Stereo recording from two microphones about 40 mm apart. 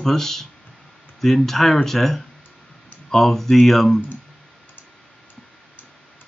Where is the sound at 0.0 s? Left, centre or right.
Centre.